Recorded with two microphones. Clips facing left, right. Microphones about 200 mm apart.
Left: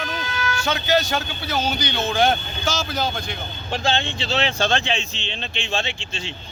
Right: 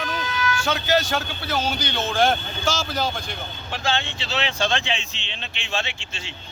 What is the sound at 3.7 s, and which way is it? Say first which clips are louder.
Speech: left 3 dB; 25° left (ahead or behind).